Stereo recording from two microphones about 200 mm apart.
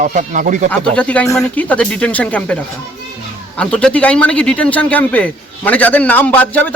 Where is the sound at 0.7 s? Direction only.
5° left (ahead or behind).